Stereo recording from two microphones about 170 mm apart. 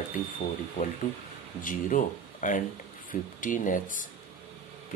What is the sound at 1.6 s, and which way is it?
Speech, 50° left (ahead or behind).